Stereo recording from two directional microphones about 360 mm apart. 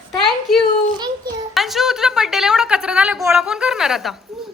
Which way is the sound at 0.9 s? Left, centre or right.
Centre.